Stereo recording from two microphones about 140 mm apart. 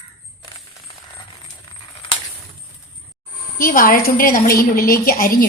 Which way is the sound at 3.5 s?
85° left.